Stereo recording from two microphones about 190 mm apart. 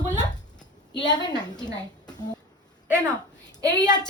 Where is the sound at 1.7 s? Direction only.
20° left (ahead or behind).